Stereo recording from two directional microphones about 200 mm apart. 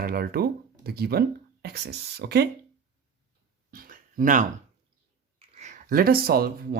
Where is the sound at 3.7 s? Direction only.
45° right (ahead or behind).